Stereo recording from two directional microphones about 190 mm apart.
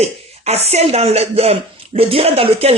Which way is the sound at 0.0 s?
35° right (ahead or behind).